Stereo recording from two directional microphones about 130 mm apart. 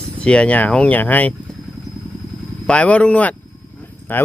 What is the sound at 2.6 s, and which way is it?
Speech, 10° left (ahead or behind).